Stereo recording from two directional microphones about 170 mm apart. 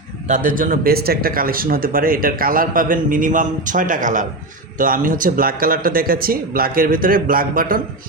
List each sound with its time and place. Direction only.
0.3 s a man's voice: 50° right (ahead or behind)